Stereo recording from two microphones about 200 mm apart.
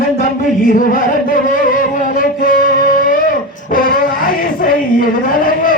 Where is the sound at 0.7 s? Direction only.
40° left (ahead or behind).